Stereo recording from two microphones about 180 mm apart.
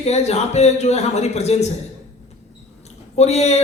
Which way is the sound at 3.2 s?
40° left (ahead or behind).